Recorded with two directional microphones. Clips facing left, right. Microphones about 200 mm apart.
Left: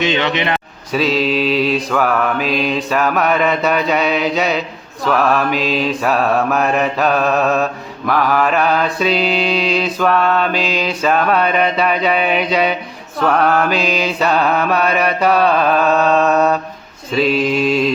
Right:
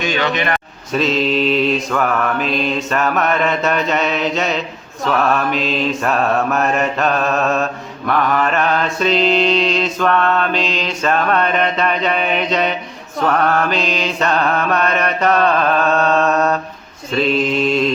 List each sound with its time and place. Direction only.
0.0 s a man's voice: 25° left (ahead or behind)
0.9 s mantra: 5° left (ahead or behind)